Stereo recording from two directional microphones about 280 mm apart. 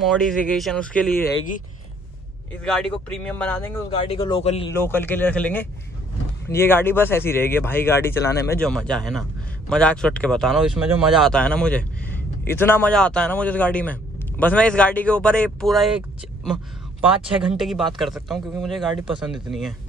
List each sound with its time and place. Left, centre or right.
0.0 s speech: centre
2.6 s speech: centre
4.0 s a man's voice: centre
4.6 s speech: centre
17.0 s speech: centre